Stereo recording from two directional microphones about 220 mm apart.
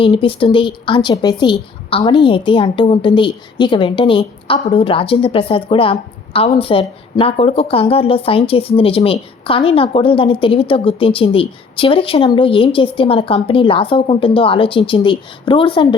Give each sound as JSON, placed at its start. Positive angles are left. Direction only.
{"t": 0.0, "sound": "a woman's voice", "side_deg": 25}